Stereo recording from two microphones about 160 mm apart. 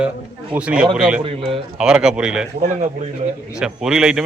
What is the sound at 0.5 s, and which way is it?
A man's voice, 5° right (ahead or behind).